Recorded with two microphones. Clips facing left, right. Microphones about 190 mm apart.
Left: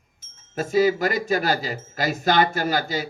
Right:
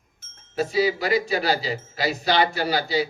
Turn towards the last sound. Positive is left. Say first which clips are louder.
# right 1 dB
turn(degrees=45)  # may be behind; listen again after turning